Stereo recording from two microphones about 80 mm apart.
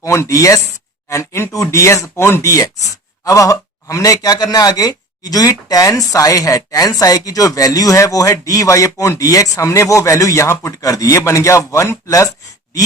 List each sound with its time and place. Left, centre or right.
0.0 s speech: left